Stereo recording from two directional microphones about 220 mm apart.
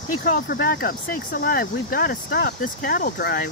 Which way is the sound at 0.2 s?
40° left (ahead or behind).